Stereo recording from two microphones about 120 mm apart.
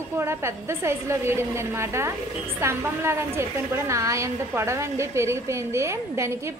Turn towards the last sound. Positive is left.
turn(degrees=-25)  # may be behind; listen again after turning